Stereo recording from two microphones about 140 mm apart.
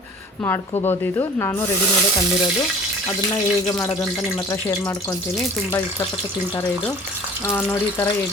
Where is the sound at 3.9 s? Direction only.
25° left (ahead or behind).